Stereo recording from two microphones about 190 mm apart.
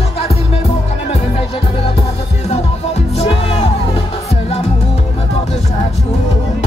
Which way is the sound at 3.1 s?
30° left (ahead or behind).